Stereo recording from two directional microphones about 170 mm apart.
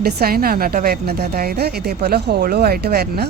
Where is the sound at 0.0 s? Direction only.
65° right (ahead or behind).